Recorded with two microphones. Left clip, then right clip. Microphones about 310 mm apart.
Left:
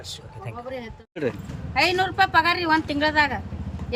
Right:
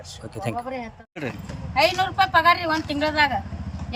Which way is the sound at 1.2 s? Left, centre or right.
Centre.